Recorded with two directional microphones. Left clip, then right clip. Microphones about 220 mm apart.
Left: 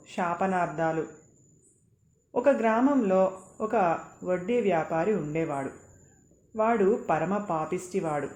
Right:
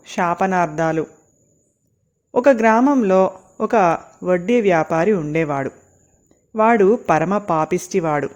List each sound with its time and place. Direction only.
0.0 s speech: 45° right (ahead or behind)
2.3 s speech: 45° right (ahead or behind)